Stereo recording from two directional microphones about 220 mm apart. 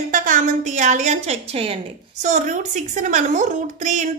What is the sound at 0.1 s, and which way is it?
A woman's voice, 35° right (ahead or behind).